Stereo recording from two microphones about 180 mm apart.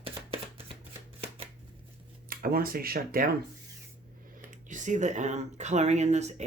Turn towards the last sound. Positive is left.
turn(degrees=-40)  # may be behind; listen again after turning